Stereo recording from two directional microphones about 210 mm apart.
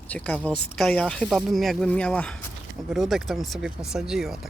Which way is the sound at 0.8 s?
5° left (ahead or behind).